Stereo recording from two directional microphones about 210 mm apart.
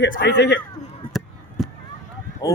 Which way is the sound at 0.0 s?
55° left (ahead or behind).